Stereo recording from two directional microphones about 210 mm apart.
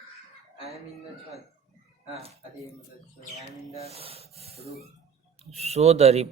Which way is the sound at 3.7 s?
30° right (ahead or behind).